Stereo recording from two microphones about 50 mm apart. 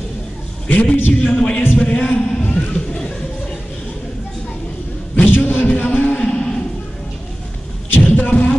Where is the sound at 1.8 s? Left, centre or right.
Left.